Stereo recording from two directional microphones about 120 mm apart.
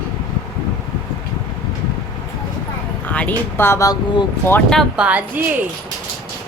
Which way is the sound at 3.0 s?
10° left (ahead or behind).